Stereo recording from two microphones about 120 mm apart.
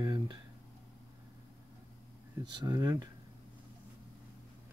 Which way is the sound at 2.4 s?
35° right (ahead or behind).